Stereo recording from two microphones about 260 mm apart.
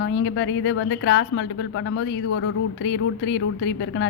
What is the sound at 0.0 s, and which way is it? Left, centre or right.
Speech, left.